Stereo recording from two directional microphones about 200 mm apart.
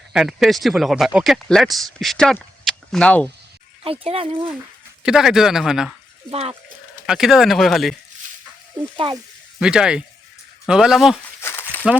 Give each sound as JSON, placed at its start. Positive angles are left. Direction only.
{"t": 0.1, "sound": "speech", "side_deg": 0}
{"t": 3.8, "sound": "speech", "side_deg": -30}
{"t": 5.0, "sound": "speech", "side_deg": -5}
{"t": 6.3, "sound": "speech", "side_deg": -30}
{"t": 7.1, "sound": "speech", "side_deg": 0}
{"t": 9.6, "sound": "speech", "side_deg": -5}
{"t": 11.3, "sound": "a sound", "side_deg": 10}